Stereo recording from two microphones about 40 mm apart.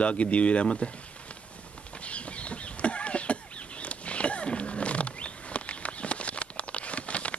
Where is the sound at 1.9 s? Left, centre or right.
Left.